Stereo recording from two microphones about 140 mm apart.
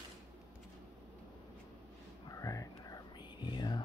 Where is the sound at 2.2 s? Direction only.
25° left (ahead or behind).